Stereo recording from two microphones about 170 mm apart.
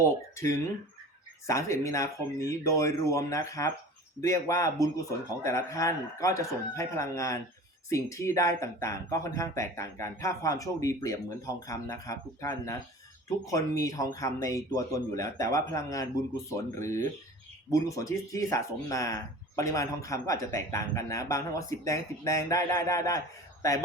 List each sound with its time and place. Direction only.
0.0 s speech: 15° left (ahead or behind)